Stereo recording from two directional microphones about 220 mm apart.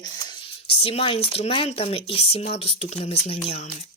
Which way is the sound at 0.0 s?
20° left (ahead or behind).